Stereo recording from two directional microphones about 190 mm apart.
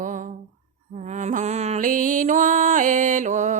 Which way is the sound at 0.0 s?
40° right (ahead or behind).